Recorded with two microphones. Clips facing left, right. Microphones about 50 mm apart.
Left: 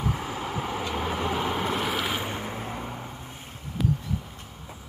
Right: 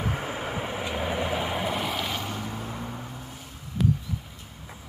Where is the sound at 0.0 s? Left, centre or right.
Right; by 2.1 s centre.